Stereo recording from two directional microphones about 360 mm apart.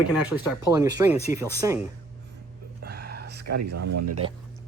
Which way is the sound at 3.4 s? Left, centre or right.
Right.